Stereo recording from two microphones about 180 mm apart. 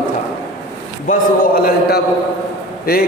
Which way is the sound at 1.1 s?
55° left (ahead or behind).